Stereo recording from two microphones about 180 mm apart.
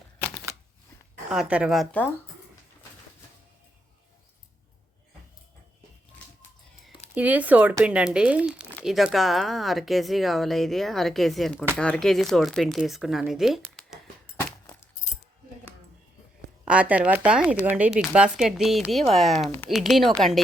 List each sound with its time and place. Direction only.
1.3 s speech: 5° right (ahead or behind)
7.1 s speech: 10° right (ahead or behind)
14.3 s a sound: 15° left (ahead or behind)
16.6 s speech: 5° right (ahead or behind)